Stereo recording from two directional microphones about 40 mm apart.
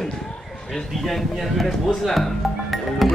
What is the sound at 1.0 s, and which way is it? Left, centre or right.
Speech, centre.